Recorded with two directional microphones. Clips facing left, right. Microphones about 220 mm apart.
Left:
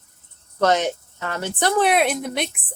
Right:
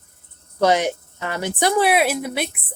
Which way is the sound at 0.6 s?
10° right (ahead or behind).